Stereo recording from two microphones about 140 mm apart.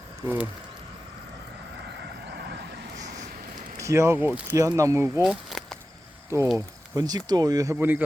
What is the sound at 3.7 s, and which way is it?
Speech, 20° right (ahead or behind).